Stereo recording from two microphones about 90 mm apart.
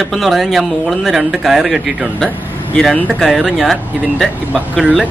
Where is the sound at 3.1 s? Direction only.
Centre (ahead or behind).